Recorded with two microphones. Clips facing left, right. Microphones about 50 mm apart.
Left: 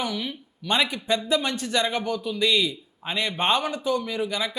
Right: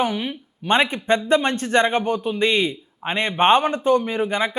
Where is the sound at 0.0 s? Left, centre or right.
Right.